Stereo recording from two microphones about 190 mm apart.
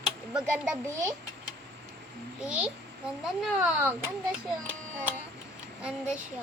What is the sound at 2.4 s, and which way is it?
Speech, 5° right (ahead or behind).